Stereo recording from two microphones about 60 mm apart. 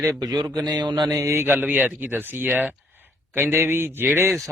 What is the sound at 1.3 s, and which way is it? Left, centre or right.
Speech, right.